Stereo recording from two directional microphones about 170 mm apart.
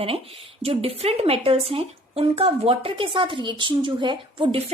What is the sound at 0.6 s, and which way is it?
A woman's voice, 35° right (ahead or behind).